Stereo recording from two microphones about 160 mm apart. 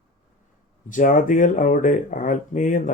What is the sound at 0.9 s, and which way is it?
Speech, 55° left (ahead or behind).